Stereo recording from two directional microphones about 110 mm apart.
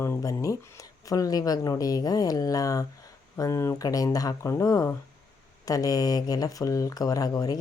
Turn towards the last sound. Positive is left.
turn(degrees=35)  # may be behind; listen again after turning